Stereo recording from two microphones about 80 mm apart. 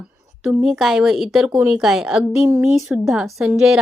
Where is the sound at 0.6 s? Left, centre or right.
Centre.